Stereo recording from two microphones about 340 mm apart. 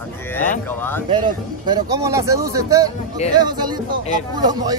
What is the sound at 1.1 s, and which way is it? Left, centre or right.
Speech, centre.